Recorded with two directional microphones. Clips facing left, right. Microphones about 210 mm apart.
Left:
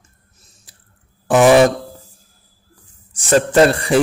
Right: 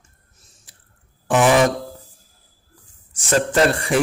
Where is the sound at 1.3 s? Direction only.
35° left (ahead or behind).